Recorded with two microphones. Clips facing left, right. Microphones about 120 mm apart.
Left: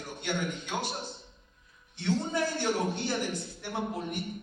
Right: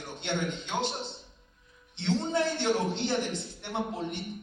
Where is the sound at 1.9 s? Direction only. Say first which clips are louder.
Right 2 dB; 20° right (ahead or behind).